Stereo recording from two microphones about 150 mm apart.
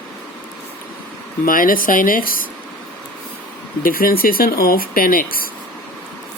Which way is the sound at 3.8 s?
75° left (ahead or behind).